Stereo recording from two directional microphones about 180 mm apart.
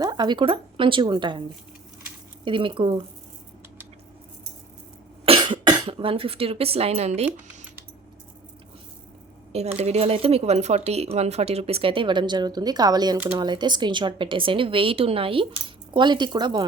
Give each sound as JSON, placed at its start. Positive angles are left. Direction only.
{"t": 0.0, "sound": "a woman's voice", "side_deg": -20}
{"t": 5.2, "sound": "speech", "side_deg": -30}
{"t": 9.5, "sound": "speech", "side_deg": -35}
{"t": 13.1, "sound": "speech", "side_deg": -10}
{"t": 13.4, "sound": "a woman's voice", "side_deg": -25}